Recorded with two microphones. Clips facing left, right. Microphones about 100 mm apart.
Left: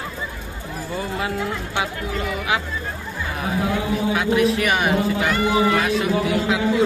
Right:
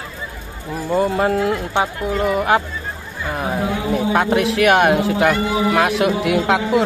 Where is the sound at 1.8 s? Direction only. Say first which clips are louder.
Right 5 dB; 45° right (ahead or behind).